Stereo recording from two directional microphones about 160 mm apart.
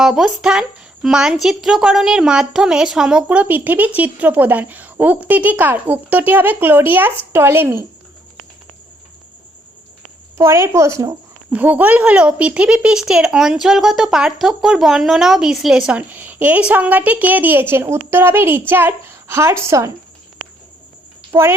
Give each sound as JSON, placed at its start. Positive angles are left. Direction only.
{"t": 0.0, "sound": "speech", "side_deg": -5}
{"t": 10.3, "sound": "a woman's voice", "side_deg": -15}
{"t": 21.3, "sound": "speech", "side_deg": -15}